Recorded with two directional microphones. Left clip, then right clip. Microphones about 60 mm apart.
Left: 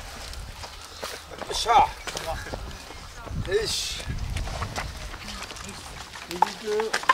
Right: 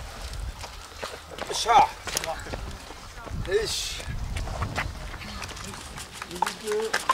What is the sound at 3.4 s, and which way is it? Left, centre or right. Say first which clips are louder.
Speech: even; centre.